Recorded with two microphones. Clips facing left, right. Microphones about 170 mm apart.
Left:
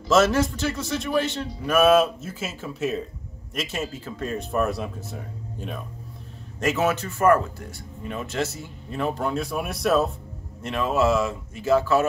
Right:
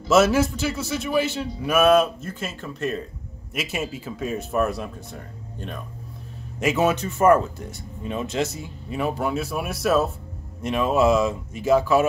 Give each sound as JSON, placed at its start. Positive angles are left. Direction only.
{"t": 0.1, "sound": "a man's voice", "side_deg": -5}
{"t": 3.5, "sound": "speech", "side_deg": -10}
{"t": 6.6, "sound": "speech", "side_deg": -15}
{"t": 10.6, "sound": "a man's voice", "side_deg": -15}